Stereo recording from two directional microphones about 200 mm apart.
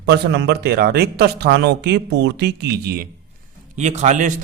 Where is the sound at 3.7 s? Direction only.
35° right (ahead or behind).